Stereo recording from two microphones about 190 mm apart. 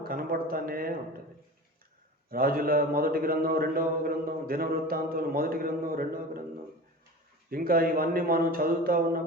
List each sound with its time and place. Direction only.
0.0 s a man's voice: 50° right (ahead or behind)
2.3 s a man's voice: 50° right (ahead or behind)
7.5 s a man's voice: 50° right (ahead or behind)